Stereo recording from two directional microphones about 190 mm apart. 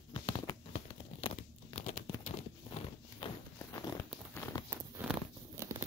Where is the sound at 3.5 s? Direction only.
20° left (ahead or behind).